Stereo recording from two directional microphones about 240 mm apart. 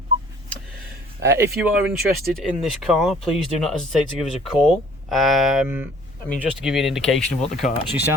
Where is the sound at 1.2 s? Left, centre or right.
Centre.